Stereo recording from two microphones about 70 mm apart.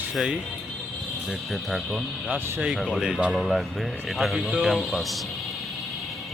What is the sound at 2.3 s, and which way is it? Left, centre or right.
Speech, centre.